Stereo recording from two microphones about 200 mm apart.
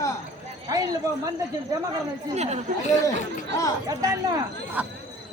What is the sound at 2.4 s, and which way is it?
Speech, 35° right (ahead or behind).